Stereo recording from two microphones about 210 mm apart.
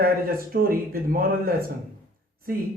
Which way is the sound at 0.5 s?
45° right (ahead or behind).